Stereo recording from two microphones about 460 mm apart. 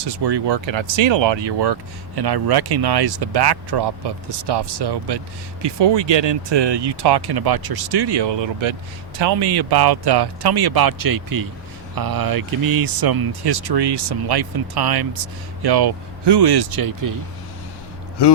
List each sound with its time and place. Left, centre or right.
0.0 s speech: right
18.2 s speech: left